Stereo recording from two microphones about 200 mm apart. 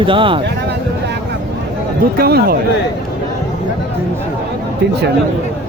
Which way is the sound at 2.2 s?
50° right (ahead or behind).